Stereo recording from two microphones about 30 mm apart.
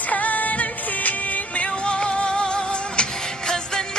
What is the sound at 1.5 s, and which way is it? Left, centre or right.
Music, left.